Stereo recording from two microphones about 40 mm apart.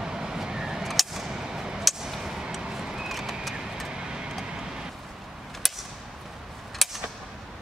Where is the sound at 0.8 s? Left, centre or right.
Centre.